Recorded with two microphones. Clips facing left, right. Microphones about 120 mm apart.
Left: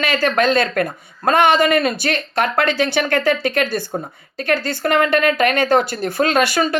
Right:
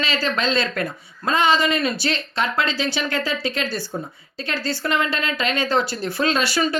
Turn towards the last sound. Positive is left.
turn(degrees=50)  # may be behind; listen again after turning